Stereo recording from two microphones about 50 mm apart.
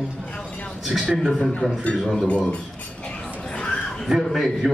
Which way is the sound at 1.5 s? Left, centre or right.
Centre.